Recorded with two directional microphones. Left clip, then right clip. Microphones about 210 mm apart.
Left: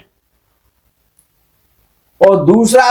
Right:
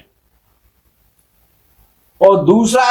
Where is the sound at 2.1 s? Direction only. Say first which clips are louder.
Left 1 dB; 35° left (ahead or behind).